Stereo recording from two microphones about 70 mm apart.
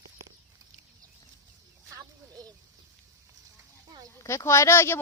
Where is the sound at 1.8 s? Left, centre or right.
Right.